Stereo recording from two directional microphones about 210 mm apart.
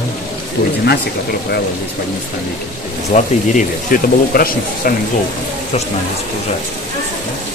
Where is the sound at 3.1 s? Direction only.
35° left (ahead or behind).